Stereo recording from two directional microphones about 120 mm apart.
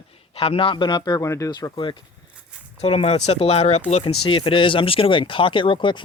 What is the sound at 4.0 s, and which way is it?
Speech, 50° left (ahead or behind).